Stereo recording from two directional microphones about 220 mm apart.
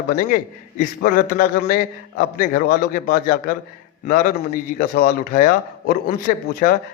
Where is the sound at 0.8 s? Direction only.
40° left (ahead or behind).